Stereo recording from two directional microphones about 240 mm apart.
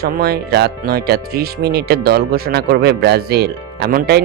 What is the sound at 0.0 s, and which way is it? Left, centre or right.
Speech, right.